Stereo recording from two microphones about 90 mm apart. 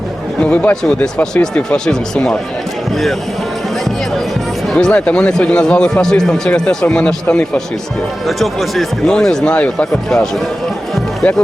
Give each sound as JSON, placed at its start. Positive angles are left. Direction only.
{"t": 0.4, "sound": "speech", "side_deg": 15}
{"t": 4.7, "sound": "speech", "side_deg": 10}
{"t": 8.3, "sound": "speech", "side_deg": 0}